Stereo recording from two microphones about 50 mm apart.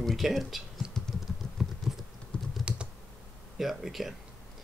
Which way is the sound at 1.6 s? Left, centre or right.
Centre.